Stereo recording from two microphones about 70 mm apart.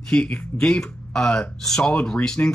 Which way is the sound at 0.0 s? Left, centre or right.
Centre.